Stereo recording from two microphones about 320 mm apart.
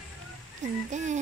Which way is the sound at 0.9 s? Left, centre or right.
Right.